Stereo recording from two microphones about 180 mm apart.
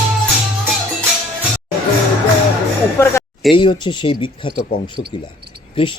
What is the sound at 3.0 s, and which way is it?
Speech, 15° left (ahead or behind).